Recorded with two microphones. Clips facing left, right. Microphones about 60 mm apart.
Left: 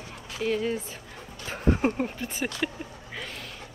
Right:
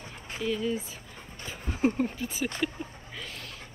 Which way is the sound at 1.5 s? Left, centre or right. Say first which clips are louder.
Left 14 dB; left.